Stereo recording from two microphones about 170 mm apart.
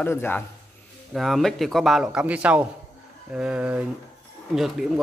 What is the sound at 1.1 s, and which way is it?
A man's voice, centre (ahead or behind).